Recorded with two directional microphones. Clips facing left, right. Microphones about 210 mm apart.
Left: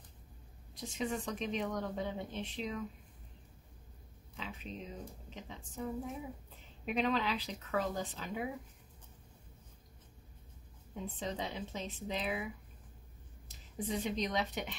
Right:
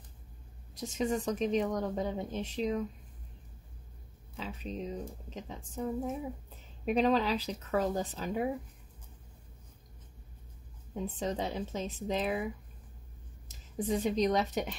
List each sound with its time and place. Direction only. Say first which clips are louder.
0.7 s speech: right 6 dB; 40° right (ahead or behind)
4.4 s speech: right 6 dB; 40° right (ahead or behind)
6.9 s speech: right 6 dB; 40° right (ahead or behind)
11.1 s speech: right 5 dB; 40° right (ahead or behind)
13.7 s speech: right 6 dB; 45° right (ahead or behind)